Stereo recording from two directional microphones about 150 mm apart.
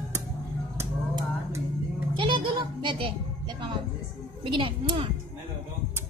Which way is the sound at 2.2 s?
35° right (ahead or behind).